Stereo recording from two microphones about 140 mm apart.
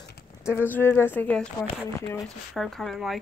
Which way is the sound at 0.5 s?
15° left (ahead or behind).